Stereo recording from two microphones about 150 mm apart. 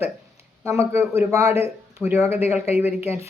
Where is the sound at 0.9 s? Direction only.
20° right (ahead or behind).